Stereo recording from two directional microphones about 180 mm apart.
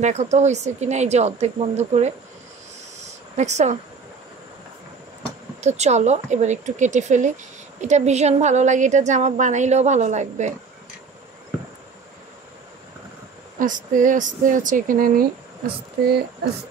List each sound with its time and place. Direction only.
0.0 s a woman's voice: 40° right (ahead or behind)
3.0 s a sound: 40° right (ahead or behind)
5.6 s a woman's voice: 40° right (ahead or behind)
13.6 s speech: 45° right (ahead or behind)